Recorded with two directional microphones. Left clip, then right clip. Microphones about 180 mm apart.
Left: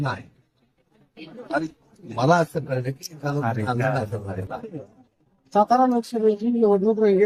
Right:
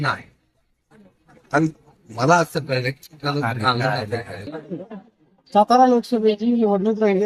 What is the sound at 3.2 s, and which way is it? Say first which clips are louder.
Speech: right 5 dB; 5° left (ahead or behind).